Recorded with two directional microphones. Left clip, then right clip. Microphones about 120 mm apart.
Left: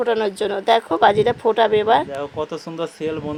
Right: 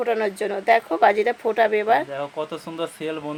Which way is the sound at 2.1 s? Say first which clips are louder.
Left 2 dB; 60° left (ahead or behind).